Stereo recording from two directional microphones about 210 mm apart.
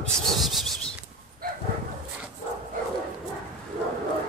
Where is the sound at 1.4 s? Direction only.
45° right (ahead or behind).